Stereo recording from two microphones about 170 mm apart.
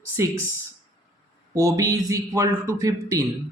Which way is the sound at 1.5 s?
20° right (ahead or behind).